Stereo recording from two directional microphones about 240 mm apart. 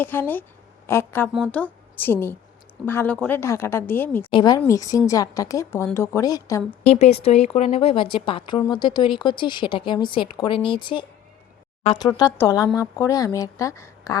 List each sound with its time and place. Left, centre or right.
0.0 s a woman's voice: centre
6.8 s a woman's voice: left